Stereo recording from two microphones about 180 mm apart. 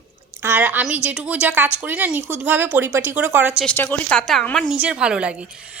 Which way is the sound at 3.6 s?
10° left (ahead or behind).